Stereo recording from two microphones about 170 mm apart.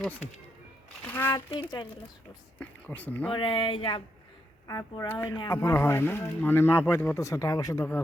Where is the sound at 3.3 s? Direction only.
30° left (ahead or behind).